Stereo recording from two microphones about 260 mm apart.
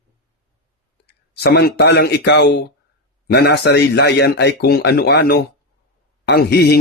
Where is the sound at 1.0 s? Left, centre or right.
Left.